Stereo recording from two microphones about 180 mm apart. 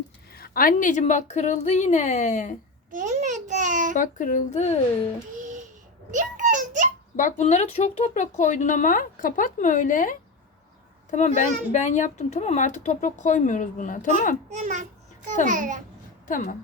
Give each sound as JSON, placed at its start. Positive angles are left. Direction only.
{"t": 0.3, "sound": "a woman's voice", "side_deg": 55}
{"t": 2.9, "sound": "a child's voice", "side_deg": -45}
{"t": 3.9, "sound": "a child's voice", "side_deg": 45}
{"t": 5.4, "sound": "babbling", "side_deg": -45}
{"t": 6.1, "sound": "a sound", "side_deg": -45}
{"t": 7.2, "sound": "a child's voice", "side_deg": 45}
{"t": 14.5, "sound": "a child's voice", "side_deg": -40}
{"t": 16.3, "sound": "a child's voice", "side_deg": 50}